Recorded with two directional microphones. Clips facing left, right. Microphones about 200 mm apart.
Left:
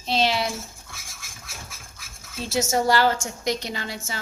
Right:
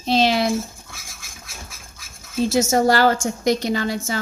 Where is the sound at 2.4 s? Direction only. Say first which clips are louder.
Right 5 dB; 45° right (ahead or behind).